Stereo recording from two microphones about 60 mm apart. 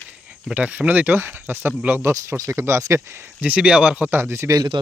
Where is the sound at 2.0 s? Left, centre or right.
Right.